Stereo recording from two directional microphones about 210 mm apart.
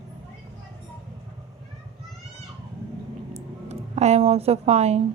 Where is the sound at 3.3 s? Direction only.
30° right (ahead or behind).